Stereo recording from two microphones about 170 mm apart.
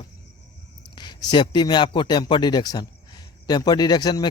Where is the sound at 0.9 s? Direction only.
25° left (ahead or behind).